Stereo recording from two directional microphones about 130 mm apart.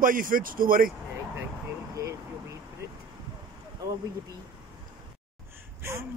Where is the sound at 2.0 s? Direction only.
25° right (ahead or behind).